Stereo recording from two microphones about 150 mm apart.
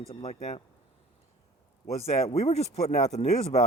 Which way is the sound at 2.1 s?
45° left (ahead or behind).